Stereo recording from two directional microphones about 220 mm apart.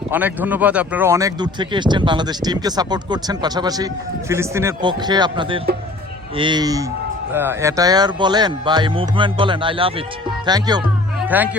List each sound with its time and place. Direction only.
0.1 s speech: 10° right (ahead or behind)
11.3 s speech: 10° right (ahead or behind)